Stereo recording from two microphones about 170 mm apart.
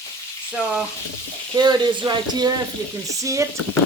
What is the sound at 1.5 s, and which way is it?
Speech, 25° right (ahead or behind).